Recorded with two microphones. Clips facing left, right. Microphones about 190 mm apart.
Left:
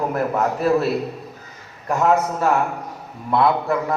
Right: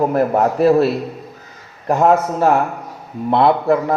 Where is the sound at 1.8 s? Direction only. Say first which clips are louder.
Right 4 dB; 30° right (ahead or behind).